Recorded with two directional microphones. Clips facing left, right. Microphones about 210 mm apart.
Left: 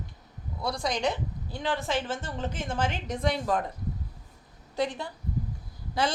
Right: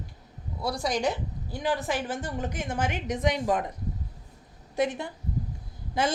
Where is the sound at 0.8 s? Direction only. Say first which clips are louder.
Right 1 dB; 15° right (ahead or behind).